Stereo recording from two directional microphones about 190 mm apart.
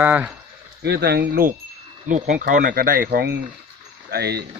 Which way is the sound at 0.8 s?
60° right (ahead or behind).